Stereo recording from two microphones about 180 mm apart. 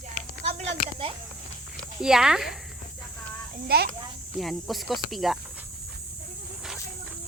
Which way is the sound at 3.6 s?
60° right (ahead or behind).